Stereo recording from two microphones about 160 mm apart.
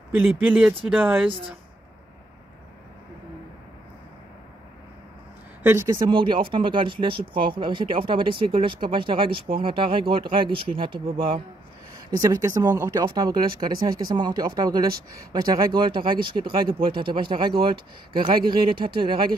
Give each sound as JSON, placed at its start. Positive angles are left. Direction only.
{"t": 0.1, "sound": "speech", "side_deg": -10}
{"t": 5.6, "sound": "speech", "side_deg": -15}
{"t": 6.0, "sound": "speech", "side_deg": -30}
{"t": 12.2, "sound": "speech", "side_deg": -20}
{"t": 12.9, "sound": "speech", "side_deg": -25}
{"t": 18.4, "sound": "speech", "side_deg": -70}
{"t": 18.9, "sound": "speech", "side_deg": -30}